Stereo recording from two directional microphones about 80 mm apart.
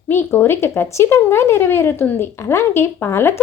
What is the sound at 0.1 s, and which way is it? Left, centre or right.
Speech, left.